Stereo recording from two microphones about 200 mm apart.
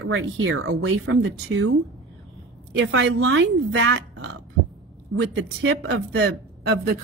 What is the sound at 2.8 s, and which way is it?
Speech, 70° right (ahead or behind).